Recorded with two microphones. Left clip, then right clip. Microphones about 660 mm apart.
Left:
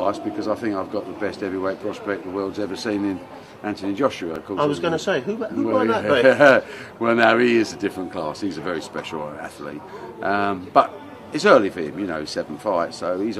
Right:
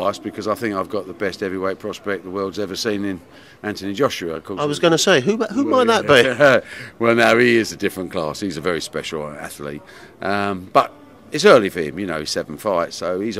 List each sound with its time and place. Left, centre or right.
0.0 s a man's voice: right
6.4 s a man's voice: right